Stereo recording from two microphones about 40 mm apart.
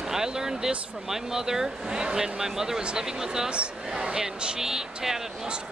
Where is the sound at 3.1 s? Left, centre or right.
Centre.